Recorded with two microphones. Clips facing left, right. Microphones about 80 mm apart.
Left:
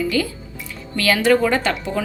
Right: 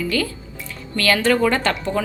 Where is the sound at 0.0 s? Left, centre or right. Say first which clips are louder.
Left 2 dB; centre.